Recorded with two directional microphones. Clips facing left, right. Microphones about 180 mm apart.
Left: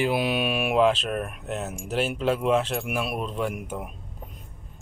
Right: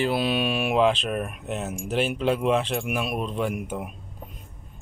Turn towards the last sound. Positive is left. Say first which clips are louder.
# right 2 dB
turn(degrees=-5)  # may be behind; listen again after turning